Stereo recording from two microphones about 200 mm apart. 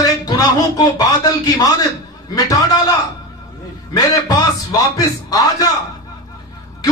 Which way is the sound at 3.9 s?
20° left (ahead or behind).